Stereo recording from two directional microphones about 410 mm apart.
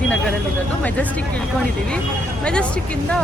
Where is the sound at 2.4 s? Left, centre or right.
Centre.